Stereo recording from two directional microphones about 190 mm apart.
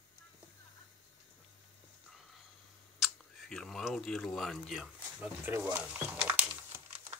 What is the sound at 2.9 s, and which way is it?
Speech, centre (ahead or behind).